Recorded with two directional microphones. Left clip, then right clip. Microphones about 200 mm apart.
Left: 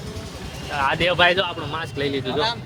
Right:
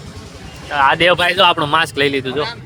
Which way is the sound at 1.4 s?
50° right (ahead or behind).